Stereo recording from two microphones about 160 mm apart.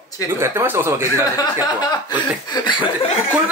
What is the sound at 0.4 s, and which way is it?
Speech, 15° right (ahead or behind).